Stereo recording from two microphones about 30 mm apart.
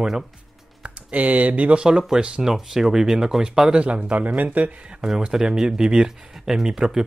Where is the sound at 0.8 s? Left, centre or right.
Right.